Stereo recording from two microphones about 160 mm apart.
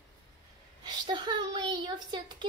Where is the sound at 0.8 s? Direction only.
25° right (ahead or behind).